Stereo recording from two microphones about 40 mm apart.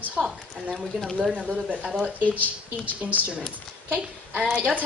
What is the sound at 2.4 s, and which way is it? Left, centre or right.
Speech, right.